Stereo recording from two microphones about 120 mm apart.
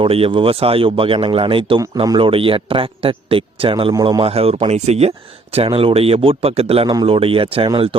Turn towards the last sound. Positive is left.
turn(degrees=-45)  # may be behind; listen again after turning